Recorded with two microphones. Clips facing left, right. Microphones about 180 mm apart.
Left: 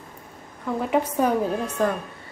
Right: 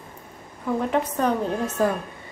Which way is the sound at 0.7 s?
5° left (ahead or behind).